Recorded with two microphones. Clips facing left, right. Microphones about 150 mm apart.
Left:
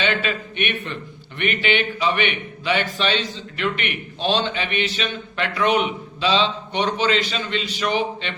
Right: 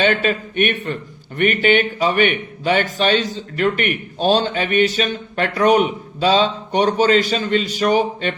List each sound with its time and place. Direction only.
0.0 s speech: 45° right (ahead or behind)